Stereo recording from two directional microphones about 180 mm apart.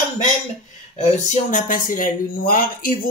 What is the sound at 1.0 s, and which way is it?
Speech, 40° left (ahead or behind).